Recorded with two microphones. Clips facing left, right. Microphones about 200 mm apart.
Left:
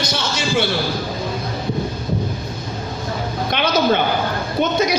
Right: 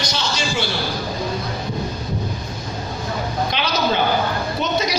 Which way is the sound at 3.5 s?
55° left (ahead or behind).